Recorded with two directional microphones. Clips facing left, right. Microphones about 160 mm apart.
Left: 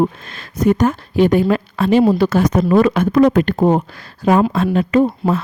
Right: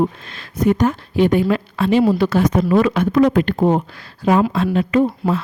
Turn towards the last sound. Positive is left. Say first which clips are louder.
# left 2 dB
turn(degrees=45)  # may be behind; listen again after turning